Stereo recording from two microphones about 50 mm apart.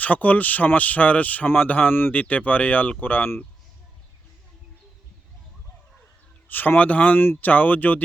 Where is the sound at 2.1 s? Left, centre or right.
Left.